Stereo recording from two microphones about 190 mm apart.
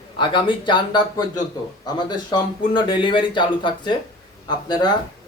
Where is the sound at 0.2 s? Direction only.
25° left (ahead or behind).